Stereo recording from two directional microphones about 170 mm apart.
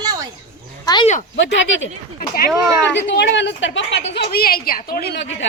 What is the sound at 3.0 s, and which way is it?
A woman's voice, 90° left.